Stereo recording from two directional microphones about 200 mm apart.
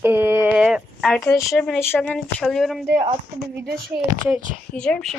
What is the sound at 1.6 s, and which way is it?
Speech, 5° left (ahead or behind).